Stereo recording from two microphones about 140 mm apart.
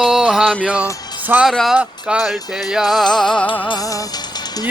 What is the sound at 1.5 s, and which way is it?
Music, centre (ahead or behind).